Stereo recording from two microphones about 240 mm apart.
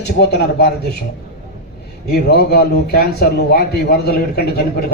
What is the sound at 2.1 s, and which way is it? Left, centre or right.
A man's voice, left.